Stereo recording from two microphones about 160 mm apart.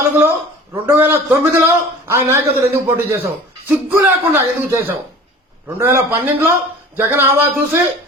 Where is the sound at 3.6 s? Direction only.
15° right (ahead or behind).